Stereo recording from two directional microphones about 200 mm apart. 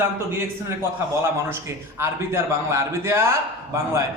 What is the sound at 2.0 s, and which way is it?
A man's voice, 15° right (ahead or behind).